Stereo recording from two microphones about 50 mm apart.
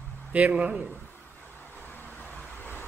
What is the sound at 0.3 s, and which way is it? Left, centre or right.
Speech, right.